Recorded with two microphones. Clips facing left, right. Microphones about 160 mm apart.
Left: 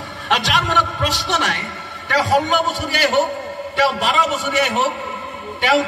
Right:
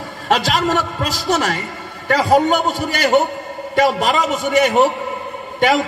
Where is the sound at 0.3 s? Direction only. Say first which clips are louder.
Right 3 dB; 40° right (ahead or behind).